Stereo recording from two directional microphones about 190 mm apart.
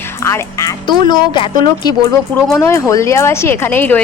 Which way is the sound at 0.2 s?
15° left (ahead or behind).